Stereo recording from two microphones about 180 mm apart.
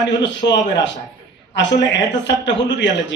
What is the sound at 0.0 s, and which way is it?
A man's voice, 80° left.